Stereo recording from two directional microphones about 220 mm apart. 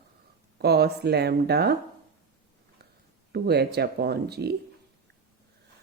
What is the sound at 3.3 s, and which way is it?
Speech, 45° right (ahead or behind).